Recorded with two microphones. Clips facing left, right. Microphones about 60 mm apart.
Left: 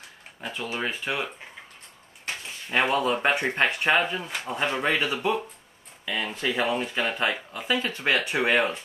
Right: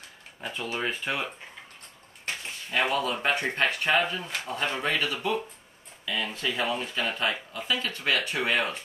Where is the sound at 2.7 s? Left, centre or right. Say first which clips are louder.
Left 3 dB; left.